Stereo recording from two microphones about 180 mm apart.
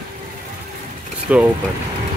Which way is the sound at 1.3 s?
10° right (ahead or behind).